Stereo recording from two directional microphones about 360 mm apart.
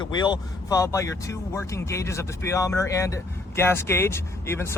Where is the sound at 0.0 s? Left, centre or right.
Centre.